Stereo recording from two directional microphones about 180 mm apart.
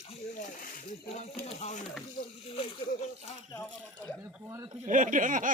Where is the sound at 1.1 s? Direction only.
35° left (ahead or behind).